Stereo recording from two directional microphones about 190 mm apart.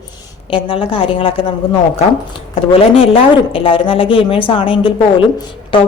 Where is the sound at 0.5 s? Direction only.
30° left (ahead or behind).